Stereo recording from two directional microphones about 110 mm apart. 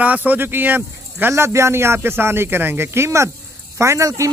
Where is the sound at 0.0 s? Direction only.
15° right (ahead or behind).